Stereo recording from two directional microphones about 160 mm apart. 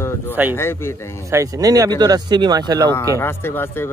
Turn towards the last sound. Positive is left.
turn(degrees=15)  # may be behind; listen again after turning